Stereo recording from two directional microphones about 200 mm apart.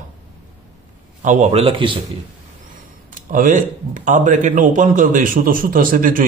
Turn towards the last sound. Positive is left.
turn(degrees=-45)  # may be behind; listen again after turning